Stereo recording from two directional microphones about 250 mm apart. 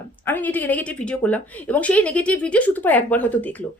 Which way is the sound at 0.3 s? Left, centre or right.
Centre.